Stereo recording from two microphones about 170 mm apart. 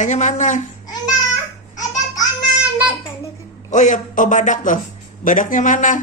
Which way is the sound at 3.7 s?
45° left (ahead or behind).